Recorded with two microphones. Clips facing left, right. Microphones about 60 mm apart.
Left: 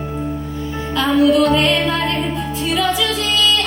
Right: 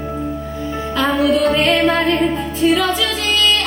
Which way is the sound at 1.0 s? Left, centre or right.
Right.